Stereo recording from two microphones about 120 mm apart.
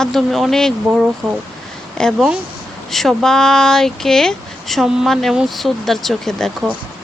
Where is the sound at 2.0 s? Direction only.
Centre (ahead or behind).